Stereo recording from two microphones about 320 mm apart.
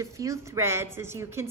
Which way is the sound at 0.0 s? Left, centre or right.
Centre.